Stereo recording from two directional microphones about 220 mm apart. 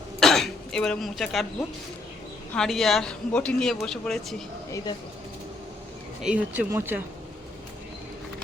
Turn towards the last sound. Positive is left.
turn(degrees=-10)  # may be behind; listen again after turning